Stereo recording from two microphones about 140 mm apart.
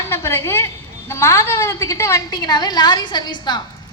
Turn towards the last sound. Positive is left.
turn(degrees=30)  # may be behind; listen again after turning